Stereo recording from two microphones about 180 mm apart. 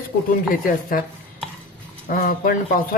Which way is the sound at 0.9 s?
50° left (ahead or behind).